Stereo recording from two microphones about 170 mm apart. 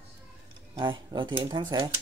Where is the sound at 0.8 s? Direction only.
30° right (ahead or behind).